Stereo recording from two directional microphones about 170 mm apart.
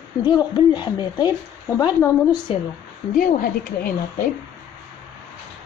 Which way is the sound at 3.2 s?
60° left (ahead or behind).